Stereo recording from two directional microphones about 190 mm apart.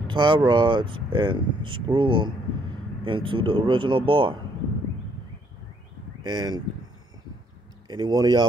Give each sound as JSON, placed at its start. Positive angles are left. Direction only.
{"t": 0.1, "sound": "speech", "side_deg": -25}
{"t": 6.2, "sound": "speech", "side_deg": -20}
{"t": 7.9, "sound": "speech", "side_deg": -20}